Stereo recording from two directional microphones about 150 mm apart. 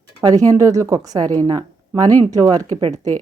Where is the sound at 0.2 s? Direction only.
25° right (ahead or behind).